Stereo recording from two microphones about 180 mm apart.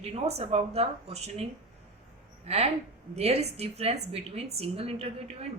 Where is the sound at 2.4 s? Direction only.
35° right (ahead or behind).